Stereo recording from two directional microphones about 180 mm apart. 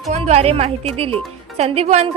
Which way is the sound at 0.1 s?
35° right (ahead or behind).